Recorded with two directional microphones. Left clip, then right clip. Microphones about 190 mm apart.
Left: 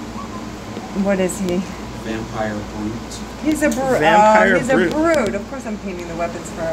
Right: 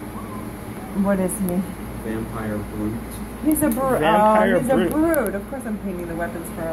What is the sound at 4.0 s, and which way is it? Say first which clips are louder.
Speech: left 5 dB; 15° left (ahead or behind).